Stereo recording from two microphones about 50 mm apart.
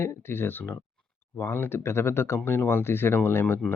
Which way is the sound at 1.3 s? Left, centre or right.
Left.